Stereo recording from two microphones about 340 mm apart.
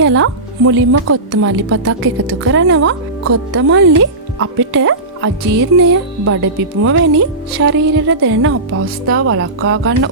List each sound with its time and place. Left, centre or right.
0.0 s a woman's voice: right